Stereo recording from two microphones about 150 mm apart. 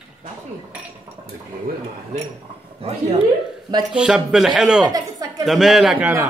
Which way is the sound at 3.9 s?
5° right (ahead or behind).